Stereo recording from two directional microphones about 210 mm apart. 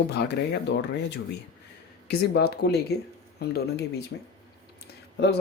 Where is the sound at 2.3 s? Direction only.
50° left (ahead or behind).